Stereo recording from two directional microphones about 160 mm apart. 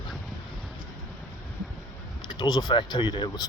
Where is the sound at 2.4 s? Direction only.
25° left (ahead or behind).